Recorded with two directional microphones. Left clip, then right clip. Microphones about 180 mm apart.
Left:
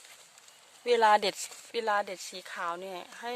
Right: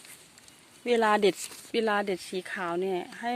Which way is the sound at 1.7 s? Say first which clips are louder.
Right 3 dB; 5° left (ahead or behind).